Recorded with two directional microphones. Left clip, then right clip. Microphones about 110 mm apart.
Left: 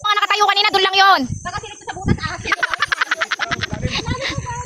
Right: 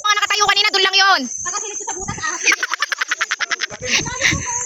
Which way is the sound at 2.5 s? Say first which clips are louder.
Even; 35° right (ahead or behind).